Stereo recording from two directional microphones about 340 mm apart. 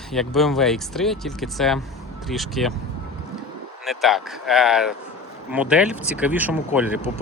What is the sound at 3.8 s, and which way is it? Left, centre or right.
Speech, centre.